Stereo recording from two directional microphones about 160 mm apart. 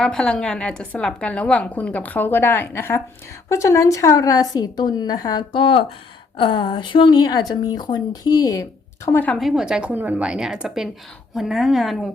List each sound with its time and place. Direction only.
0.0 s a woman's voice: 5° left (ahead or behind); by 8.6 s 20° left (ahead or behind)
9.0 s a woman's voice: 10° left (ahead or behind)
9.4 s a woman's voice: 5° right (ahead or behind)